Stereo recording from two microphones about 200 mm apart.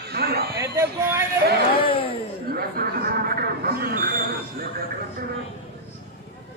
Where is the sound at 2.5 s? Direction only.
50° right (ahead or behind).